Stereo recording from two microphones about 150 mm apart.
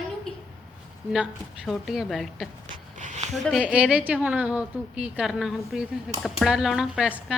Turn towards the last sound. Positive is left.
turn(degrees=-5)  # may be behind; listen again after turning